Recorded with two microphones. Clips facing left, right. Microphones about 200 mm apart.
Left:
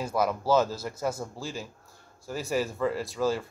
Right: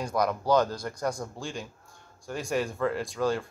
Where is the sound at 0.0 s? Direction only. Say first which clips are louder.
Even; 5° left (ahead or behind).